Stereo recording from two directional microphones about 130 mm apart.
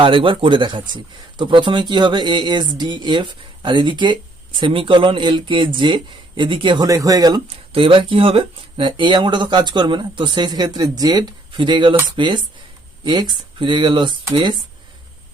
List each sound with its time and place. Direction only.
0.0 s speech: 40° right (ahead or behind)
7.7 s speech: 40° right (ahead or behind)